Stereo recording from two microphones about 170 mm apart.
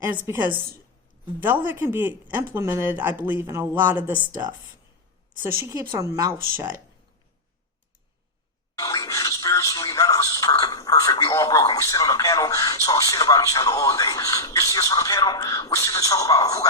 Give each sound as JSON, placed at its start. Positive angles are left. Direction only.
{"t": 0.2, "sound": "speech", "side_deg": -10}
{"t": 8.8, "sound": "speech", "side_deg": 20}